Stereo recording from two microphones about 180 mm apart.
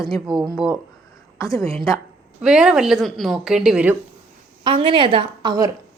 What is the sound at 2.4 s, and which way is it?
A woman's voice, 5° right (ahead or behind).